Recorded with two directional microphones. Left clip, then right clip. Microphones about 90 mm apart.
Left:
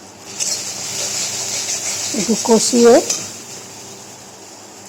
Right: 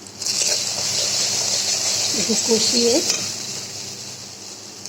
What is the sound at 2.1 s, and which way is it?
Speech, 35° left (ahead or behind).